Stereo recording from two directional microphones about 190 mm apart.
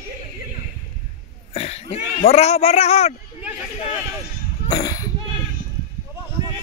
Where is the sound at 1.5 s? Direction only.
30° left (ahead or behind).